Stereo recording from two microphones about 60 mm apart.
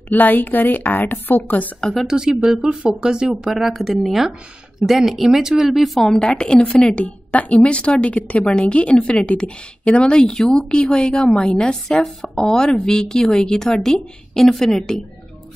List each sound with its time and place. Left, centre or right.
0.1 s a woman's voice: left
1.8 s speech: centre
2.0 s speech: centre
5.9 s speech: centre